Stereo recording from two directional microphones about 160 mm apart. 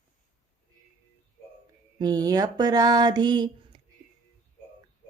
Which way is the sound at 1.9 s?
25° right (ahead or behind).